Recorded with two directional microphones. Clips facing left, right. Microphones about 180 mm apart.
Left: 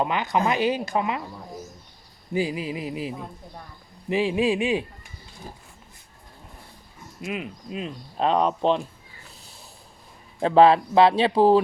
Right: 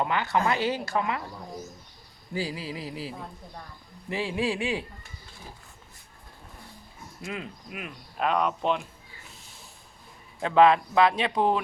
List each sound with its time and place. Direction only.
0.0 s speech: 15° left (ahead or behind)
2.3 s speech: 20° left (ahead or behind)
7.2 s speech: 20° left (ahead or behind)
10.4 s speech: 35° left (ahead or behind)